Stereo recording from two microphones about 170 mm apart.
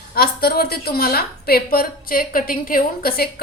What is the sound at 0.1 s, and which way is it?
A woman's voice, 65° left (ahead or behind).